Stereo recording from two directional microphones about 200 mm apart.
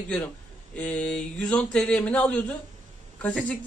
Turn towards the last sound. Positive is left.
turn(degrees=5)  # may be behind; listen again after turning